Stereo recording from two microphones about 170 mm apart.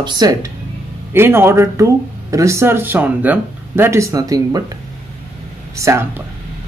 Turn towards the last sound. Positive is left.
turn(degrees=-15)  # may be behind; listen again after turning